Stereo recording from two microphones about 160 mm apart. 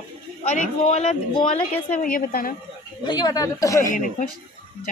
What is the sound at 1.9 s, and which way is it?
Speech, 60° left (ahead or behind).